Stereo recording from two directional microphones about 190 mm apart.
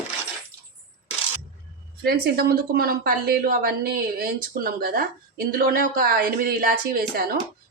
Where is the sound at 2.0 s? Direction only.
55° right (ahead or behind).